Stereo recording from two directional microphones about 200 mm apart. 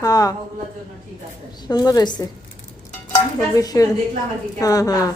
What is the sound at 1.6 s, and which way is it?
Speech, 20° left (ahead or behind).